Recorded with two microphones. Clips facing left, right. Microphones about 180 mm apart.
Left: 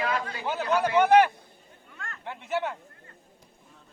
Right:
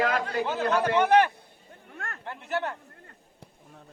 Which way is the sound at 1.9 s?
65° right (ahead or behind).